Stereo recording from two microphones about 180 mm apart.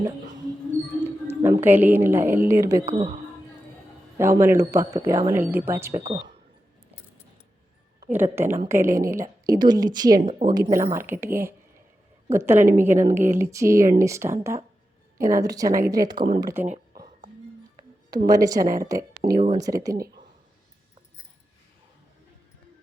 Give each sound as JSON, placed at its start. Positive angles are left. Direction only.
{"t": 1.0, "sound": "a woman's voice", "side_deg": -15}
{"t": 2.8, "sound": "speech", "side_deg": -35}
{"t": 4.2, "sound": "speech", "side_deg": -15}
{"t": 6.0, "sound": "a woman's voice", "side_deg": -30}
{"t": 8.1, "sound": "a woman's voice", "side_deg": -10}
{"t": 10.2, "sound": "a woman's voice", "side_deg": -45}
{"t": 10.5, "sound": "a woman's voice", "side_deg": -20}
{"t": 18.1, "sound": "a woman's voice", "side_deg": -20}